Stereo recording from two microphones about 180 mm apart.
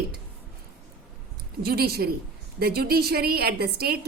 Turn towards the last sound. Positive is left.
turn(degrees=-60)  # may be behind; listen again after turning